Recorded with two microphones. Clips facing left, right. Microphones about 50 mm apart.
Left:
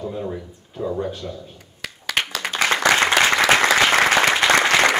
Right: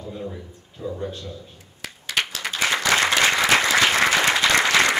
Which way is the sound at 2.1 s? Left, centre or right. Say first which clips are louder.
Left 2 dB; left.